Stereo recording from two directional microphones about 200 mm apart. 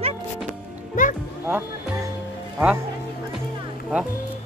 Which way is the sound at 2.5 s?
10° right (ahead or behind).